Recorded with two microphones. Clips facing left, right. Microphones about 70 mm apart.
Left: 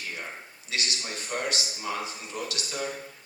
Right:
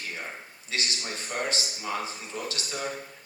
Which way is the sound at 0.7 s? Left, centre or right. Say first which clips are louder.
Even; right.